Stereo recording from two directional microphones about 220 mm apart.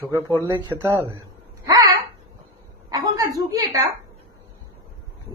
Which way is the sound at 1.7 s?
15° right (ahead or behind).